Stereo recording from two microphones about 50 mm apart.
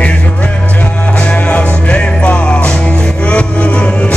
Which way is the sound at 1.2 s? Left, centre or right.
Left.